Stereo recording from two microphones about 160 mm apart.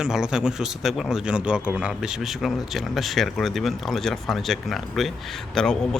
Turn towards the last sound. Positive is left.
turn(degrees=5)  # may be behind; listen again after turning